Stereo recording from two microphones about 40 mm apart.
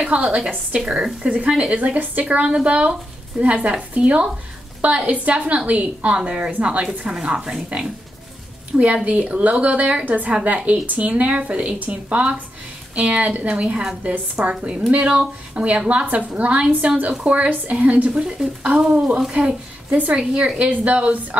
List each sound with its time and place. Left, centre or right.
0.0 s a woman's voice: right
0.7 s speech: centre
1.2 s speech: right
6.1 s speech: right
8.7 s speech: right
10.0 s a woman's voice: right
10.4 s speech: right
11.8 s speech: right
14.4 s speech: right
15.0 s speech: right
18.1 s speech: centre
18.8 s a woman's voice: right